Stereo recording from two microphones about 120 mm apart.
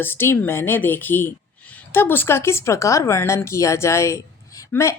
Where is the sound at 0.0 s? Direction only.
20° left (ahead or behind).